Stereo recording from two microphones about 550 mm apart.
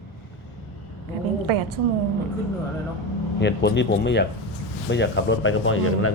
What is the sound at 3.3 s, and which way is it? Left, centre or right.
A man's voice, centre.